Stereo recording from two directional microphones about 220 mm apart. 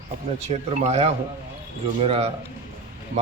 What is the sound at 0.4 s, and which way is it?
A man's voice, 30° right (ahead or behind).